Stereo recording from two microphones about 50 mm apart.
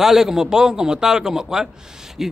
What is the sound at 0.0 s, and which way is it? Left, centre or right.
A man's voice, centre.